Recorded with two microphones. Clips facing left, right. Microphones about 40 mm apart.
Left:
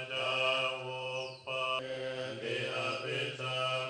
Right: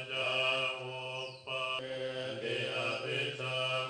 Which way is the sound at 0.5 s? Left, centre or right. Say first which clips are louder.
Left 1 dB; left.